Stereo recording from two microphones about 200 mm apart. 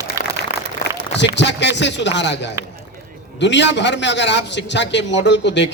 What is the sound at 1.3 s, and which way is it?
A man's voice, 60° left (ahead or behind).